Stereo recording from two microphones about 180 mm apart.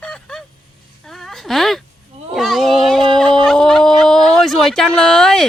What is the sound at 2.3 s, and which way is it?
A woman's voice, centre (ahead or behind).